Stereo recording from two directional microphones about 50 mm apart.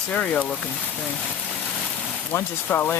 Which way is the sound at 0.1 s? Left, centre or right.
Centre.